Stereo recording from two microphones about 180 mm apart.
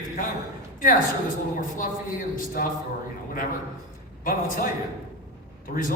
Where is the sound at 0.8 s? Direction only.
50° left (ahead or behind).